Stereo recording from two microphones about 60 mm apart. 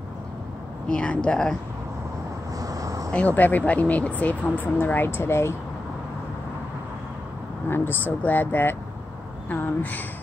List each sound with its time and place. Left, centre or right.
0.8 s speech: centre
2.5 s vehicle: right
3.1 s speech: left
7.6 s speech: left